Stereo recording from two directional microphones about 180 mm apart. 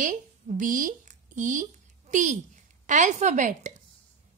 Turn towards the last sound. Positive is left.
turn(degrees=-40)  # may be behind; listen again after turning